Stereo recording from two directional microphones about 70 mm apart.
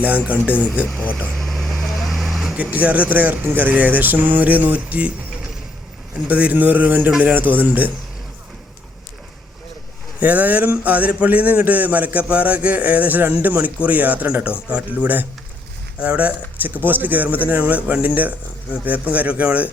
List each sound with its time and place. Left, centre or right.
0.0 s speech: right
1.4 s vehicle: centre
2.6 s speech: right
10.2 s speech: right